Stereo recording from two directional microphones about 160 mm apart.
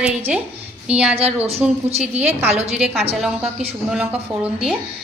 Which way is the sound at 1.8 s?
40° right (ahead or behind).